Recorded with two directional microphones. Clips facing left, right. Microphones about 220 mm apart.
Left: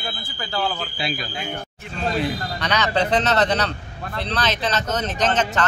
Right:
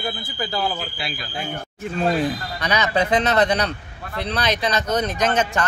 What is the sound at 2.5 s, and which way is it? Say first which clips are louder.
Speech: right 1 dB; 10° right (ahead or behind).